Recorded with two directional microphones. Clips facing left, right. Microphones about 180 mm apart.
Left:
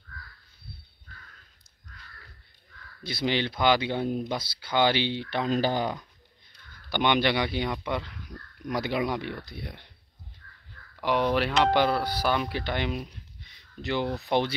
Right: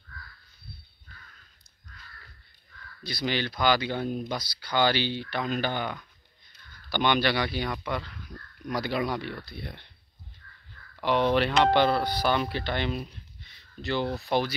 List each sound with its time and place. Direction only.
3.0 s speech: 25° left (ahead or behind)
6.9 s speech: 20° left (ahead or behind)
11.0 s speech: 10° left (ahead or behind)